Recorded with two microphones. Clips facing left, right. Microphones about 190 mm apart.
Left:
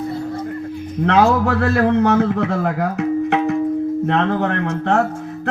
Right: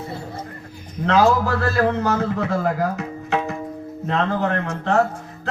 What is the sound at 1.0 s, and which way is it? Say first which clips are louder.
Speech: left 2 dB; 65° left (ahead or behind).